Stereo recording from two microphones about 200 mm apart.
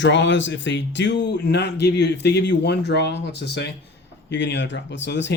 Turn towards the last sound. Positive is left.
turn(degrees=60)  # may be behind; listen again after turning